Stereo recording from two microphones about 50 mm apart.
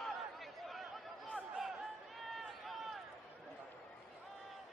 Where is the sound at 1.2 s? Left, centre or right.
Centre.